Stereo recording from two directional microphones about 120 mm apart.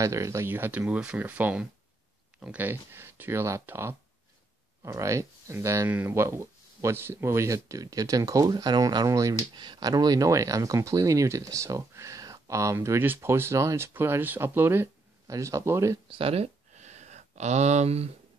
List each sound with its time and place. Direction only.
0.0 s speech: 25° right (ahead or behind)
16.1 s speech: 50° right (ahead or behind)
16.7 s a sound: 75° right (ahead or behind)